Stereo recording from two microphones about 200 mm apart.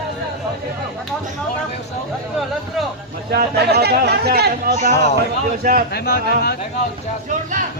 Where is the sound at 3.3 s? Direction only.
55° right (ahead or behind).